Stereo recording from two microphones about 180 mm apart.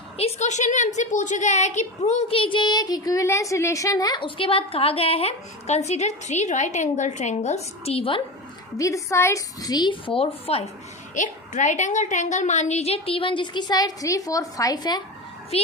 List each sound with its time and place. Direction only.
0.2 s a woman's voice: 40° left (ahead or behind)
8.8 s a woman's voice: 15° left (ahead or behind); by 10.7 s 35° left (ahead or behind)
11.1 s a woman's voice: 45° left (ahead or behind); by 15.0 s 20° left (ahead or behind)
15.5 s a child's voice: 35° left (ahead or behind)